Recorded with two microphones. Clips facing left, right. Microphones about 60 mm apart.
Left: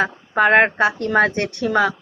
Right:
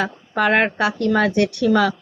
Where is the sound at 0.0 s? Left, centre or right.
Left.